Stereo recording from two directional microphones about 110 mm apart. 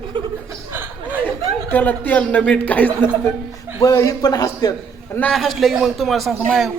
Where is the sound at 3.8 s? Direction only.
30° left (ahead or behind).